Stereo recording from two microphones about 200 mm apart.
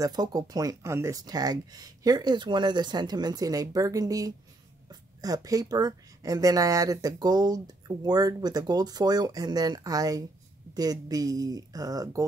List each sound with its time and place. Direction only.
0.0 s speech: 20° right (ahead or behind)